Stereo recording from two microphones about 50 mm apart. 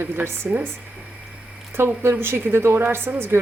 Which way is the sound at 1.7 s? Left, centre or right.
Right.